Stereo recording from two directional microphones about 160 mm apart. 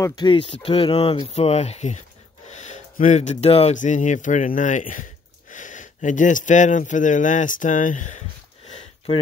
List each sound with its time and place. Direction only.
0.0 s speech: 25° left (ahead or behind)
0.5 s speech: 40° left (ahead or behind)
8.6 s a sound: 40° left (ahead or behind)